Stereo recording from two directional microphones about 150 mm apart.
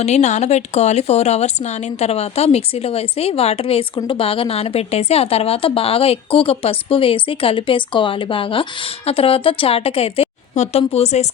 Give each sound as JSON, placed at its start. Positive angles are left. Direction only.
{"t": 0.0, "sound": "a woman's voice", "side_deg": 50}